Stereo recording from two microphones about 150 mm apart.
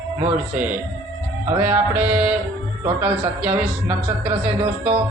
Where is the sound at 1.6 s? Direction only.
10° right (ahead or behind).